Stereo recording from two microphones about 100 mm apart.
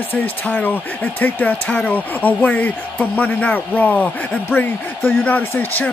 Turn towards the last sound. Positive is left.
turn(degrees=15)  # may be behind; listen again after turning